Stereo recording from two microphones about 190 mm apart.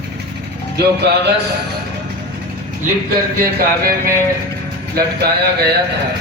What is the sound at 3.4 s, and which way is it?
A man's voice, 50° right (ahead or behind).